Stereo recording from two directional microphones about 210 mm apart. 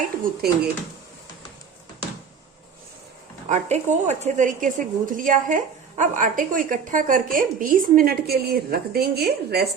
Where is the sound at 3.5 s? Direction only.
35° right (ahead or behind).